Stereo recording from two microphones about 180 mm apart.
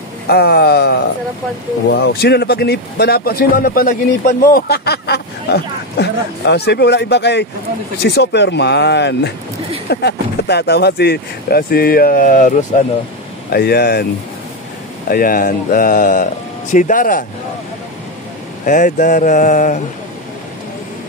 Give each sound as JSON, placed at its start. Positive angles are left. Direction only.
{"t": 0.3, "sound": "speech", "side_deg": 65}
{"t": 13.5, "sound": "speech", "side_deg": 60}
{"t": 15.0, "sound": "speech", "side_deg": 55}
{"t": 18.7, "sound": "speech", "side_deg": 45}